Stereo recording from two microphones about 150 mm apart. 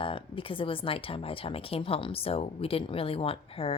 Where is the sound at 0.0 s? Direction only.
35° left (ahead or behind).